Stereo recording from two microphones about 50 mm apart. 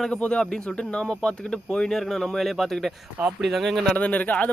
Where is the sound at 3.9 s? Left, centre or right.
Left.